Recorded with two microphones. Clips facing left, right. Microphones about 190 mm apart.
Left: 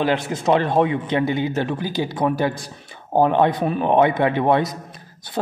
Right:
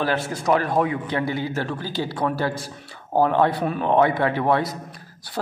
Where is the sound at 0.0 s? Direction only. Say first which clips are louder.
Left 3 dB; 20° left (ahead or behind).